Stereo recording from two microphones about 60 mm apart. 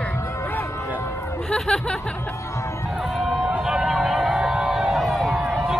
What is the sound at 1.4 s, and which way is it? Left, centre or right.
Speech, centre.